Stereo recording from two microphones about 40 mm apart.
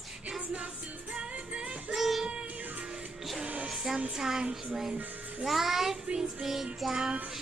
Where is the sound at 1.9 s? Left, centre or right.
Centre.